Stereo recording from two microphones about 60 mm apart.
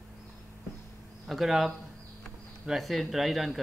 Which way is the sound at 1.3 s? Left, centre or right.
Centre.